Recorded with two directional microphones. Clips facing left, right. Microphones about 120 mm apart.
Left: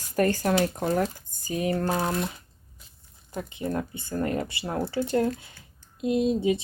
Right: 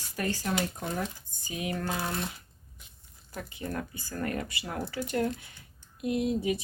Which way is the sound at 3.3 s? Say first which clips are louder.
Left 6 dB; 25° left (ahead or behind).